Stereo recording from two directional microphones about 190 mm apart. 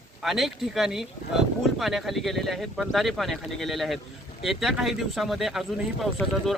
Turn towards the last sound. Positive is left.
turn(degrees=0)  # may be behind; listen again after turning